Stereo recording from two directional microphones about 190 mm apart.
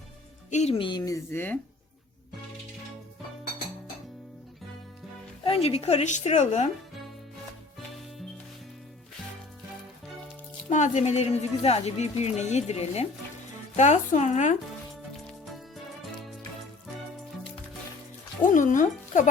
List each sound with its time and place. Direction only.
0.5 s a woman's voice: 35° left (ahead or behind); by 1.5 s 10° left (ahead or behind)
5.4 s speech: 30° left (ahead or behind)
10.7 s speech: 40° left (ahead or behind)
15.1 s music: centre (ahead or behind)
18.4 s speech: 40° left (ahead or behind)